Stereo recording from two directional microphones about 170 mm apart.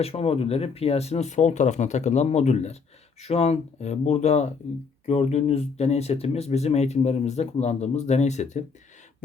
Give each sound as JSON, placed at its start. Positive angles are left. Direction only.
{"t": 0.0, "sound": "speech", "side_deg": 35}